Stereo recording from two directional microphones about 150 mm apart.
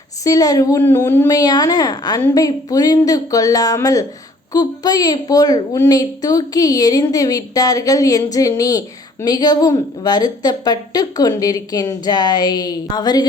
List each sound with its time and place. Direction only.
0.3 s a woman's voice: 25° left (ahead or behind)